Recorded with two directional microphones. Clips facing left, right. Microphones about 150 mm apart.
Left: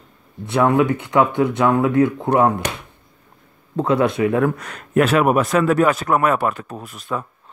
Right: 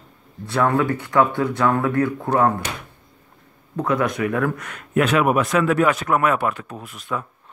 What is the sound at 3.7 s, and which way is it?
A man's voice, 25° left (ahead or behind).